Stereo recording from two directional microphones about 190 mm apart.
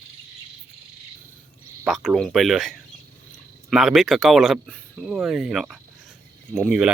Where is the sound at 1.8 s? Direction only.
Centre (ahead or behind).